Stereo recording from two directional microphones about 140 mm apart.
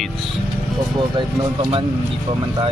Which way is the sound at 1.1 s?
35° right (ahead or behind).